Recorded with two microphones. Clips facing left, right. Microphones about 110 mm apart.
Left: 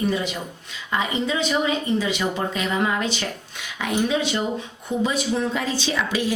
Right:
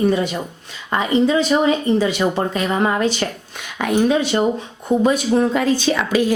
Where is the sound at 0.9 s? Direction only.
45° right (ahead or behind).